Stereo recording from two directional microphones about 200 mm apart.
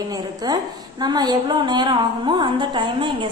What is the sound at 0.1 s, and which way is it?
A woman's voice, 20° right (ahead or behind).